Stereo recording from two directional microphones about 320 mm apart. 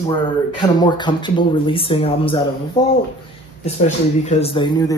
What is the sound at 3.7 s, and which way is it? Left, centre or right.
Speech, left.